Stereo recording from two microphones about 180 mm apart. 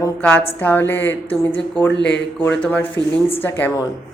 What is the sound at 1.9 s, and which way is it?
Speech, 75° left (ahead or behind).